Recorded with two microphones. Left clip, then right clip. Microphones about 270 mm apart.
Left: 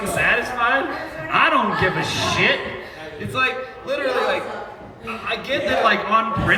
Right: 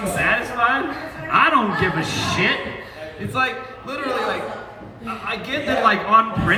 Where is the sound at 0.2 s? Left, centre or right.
Centre.